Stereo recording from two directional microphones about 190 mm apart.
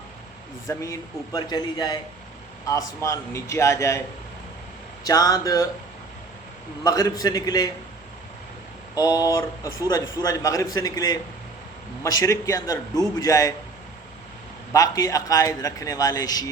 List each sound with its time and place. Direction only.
0.7 s a man's voice: 15° left (ahead or behind)
5.0 s a man's voice: 20° left (ahead or behind)
6.8 s a man's voice: 20° left (ahead or behind)
9.0 s a man's voice: 20° left (ahead or behind)
14.7 s a man's voice: 20° left (ahead or behind)